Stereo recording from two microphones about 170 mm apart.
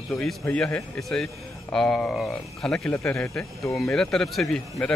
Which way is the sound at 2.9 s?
15° left (ahead or behind).